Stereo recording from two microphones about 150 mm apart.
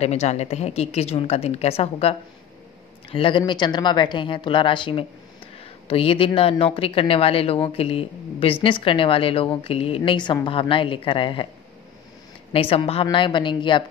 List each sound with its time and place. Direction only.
0.0 s a woman's voice: 45° left (ahead or behind)
12.5 s a woman's voice: 40° left (ahead or behind)